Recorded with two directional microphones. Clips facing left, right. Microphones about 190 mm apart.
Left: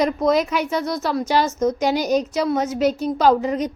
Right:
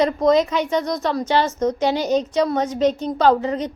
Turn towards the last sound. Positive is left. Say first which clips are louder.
# even
turn(degrees=10)  # may be behind; listen again after turning